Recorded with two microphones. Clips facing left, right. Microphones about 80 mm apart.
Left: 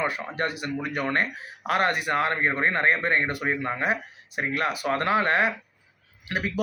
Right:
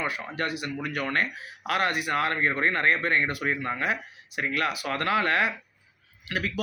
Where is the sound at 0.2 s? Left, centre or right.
Left.